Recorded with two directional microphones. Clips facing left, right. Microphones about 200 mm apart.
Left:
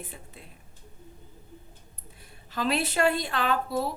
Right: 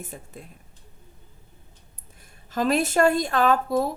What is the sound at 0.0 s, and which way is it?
Speech, 45° right (ahead or behind).